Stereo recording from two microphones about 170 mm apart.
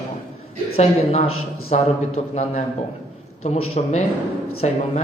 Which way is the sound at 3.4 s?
40° left (ahead or behind).